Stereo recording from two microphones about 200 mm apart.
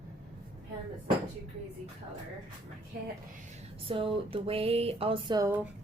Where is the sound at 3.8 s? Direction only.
25° right (ahead or behind).